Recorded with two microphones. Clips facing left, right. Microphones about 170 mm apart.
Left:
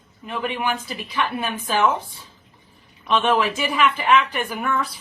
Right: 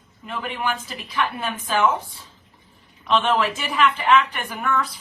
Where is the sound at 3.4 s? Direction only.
10° left (ahead or behind).